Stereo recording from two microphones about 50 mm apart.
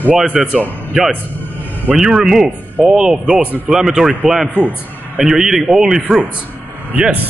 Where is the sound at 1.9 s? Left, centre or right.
Centre.